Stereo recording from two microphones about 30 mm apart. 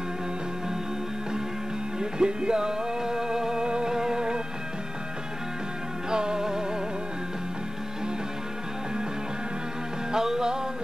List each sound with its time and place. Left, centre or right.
2.0 s music: right
6.0 s music: right
10.1 s music: centre